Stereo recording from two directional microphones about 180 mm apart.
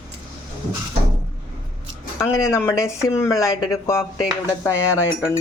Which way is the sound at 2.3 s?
15° left (ahead or behind).